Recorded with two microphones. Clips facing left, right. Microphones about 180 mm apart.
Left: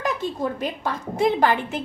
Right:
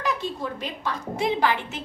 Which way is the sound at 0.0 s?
50° left (ahead or behind).